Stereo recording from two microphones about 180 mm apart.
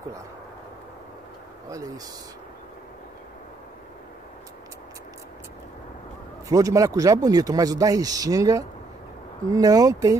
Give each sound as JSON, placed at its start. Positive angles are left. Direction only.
{"t": 6.5, "sound": "speech", "side_deg": -20}